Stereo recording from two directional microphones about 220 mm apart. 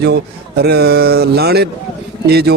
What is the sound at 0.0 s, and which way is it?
A man's voice, 50° right (ahead or behind).